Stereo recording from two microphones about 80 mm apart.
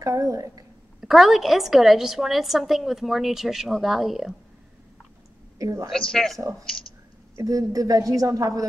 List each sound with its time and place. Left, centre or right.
0.0 s speech: right
1.0 s a woman's voice: centre
5.6 s a woman's voice: right
6.4 s speech: right
7.3 s a woman's voice: right